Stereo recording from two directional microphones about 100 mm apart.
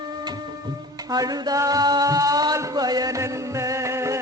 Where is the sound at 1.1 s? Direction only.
40° right (ahead or behind).